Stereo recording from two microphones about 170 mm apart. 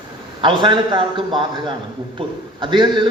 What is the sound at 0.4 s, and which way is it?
A man's voice, 25° right (ahead or behind).